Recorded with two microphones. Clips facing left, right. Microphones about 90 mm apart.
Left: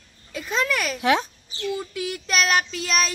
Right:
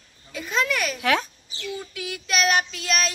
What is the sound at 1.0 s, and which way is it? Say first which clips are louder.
Speech: left 3 dB; 25° left (ahead or behind).